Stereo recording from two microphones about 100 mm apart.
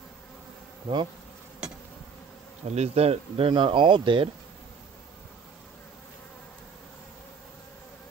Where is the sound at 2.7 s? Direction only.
90° right; by 4.3 s 55° right (ahead or behind).